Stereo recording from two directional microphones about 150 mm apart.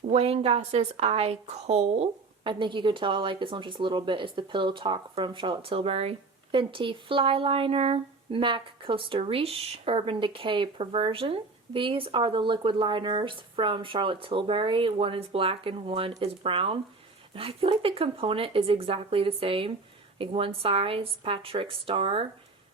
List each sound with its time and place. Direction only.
0.1 s a woman's voice: 45° right (ahead or behind)